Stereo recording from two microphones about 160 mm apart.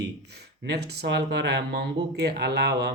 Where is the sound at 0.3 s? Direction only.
90° right.